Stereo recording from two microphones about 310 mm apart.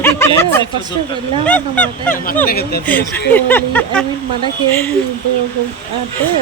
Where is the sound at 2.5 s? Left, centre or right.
Left.